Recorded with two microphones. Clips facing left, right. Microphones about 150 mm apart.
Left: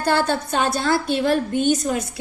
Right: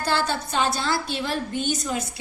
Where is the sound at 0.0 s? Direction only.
55° left (ahead or behind).